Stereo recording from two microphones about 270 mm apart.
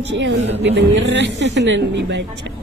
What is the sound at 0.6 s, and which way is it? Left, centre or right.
Speech, right.